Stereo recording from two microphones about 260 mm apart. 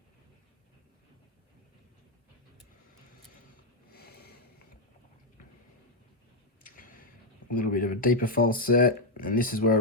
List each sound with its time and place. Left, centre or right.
3.9 s sniff: left
6.7 s tick-tock: left
7.5 s speech: left